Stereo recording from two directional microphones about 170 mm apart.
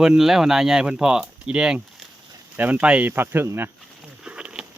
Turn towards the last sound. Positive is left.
turn(degrees=-5)  # may be behind; listen again after turning